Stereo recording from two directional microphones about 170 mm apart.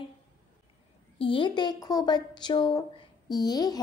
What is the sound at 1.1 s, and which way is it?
A woman's voice, 30° left (ahead or behind).